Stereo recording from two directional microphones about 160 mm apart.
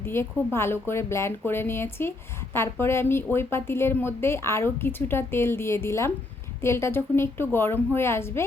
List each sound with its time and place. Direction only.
0.0 s speech: 15° left (ahead or behind)